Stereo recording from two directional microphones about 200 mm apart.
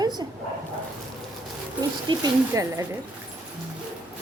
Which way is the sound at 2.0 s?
20° right (ahead or behind).